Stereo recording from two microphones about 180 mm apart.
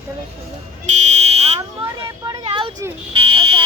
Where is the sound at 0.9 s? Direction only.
40° right (ahead or behind).